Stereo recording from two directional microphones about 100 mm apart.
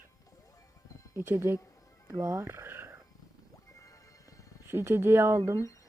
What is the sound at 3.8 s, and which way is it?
Music, 35° left (ahead or behind).